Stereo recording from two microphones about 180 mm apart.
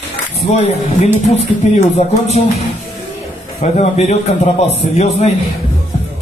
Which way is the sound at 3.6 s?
35° left (ahead or behind).